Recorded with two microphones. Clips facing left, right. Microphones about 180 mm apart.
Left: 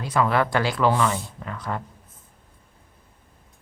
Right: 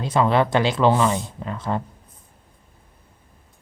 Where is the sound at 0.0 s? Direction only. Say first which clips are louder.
Right 3 dB; 25° right (ahead or behind).